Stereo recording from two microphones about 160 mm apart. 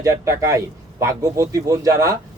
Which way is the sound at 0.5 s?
20° right (ahead or behind).